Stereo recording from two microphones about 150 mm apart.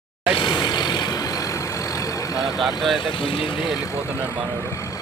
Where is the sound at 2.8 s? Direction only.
Centre (ahead or behind).